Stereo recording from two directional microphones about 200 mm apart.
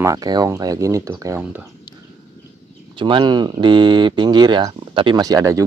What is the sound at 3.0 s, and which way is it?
Speech, 25° right (ahead or behind).